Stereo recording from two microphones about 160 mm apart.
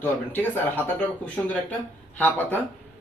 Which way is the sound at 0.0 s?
10° left (ahead or behind).